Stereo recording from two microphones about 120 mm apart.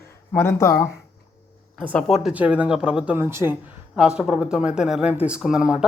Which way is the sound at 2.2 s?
10° right (ahead or behind).